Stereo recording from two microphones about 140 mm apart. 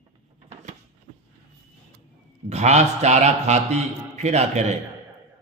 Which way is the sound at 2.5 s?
55° right (ahead or behind).